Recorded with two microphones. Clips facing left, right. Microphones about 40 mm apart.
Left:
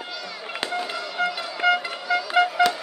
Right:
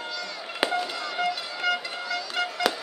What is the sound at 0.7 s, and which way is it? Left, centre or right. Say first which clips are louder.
Music: even; centre.